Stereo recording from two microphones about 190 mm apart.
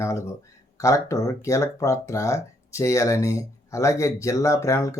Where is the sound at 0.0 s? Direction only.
15° left (ahead or behind).